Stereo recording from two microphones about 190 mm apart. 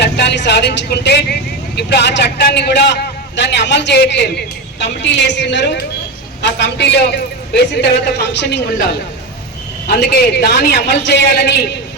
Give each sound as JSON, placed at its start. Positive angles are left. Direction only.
{"t": 0.0, "sound": "a woman's voice", "side_deg": 65}
{"t": 9.8, "sound": "a man's voice", "side_deg": 55}